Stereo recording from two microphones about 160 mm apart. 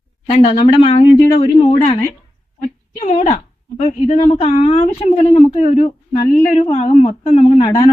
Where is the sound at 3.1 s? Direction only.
45° left (ahead or behind).